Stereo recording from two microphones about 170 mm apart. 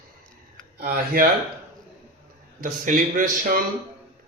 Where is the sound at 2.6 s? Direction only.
50° right (ahead or behind).